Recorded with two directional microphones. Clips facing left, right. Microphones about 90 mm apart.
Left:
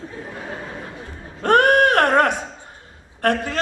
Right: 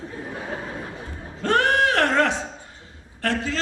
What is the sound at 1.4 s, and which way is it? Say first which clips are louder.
A man's voice: left 5 dB; 55° left (ahead or behind).